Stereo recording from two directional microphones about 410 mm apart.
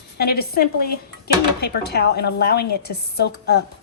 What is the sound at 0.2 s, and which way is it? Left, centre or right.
Speech, left.